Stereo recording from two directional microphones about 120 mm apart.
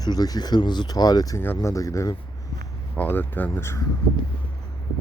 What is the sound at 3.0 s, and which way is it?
Speech, 15° left (ahead or behind).